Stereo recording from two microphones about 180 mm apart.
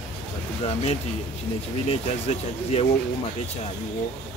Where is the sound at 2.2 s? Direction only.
35° left (ahead or behind).